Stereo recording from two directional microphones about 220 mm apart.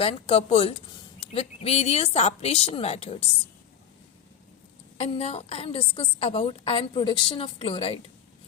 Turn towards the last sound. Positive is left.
turn(degrees=25)  # may be behind; listen again after turning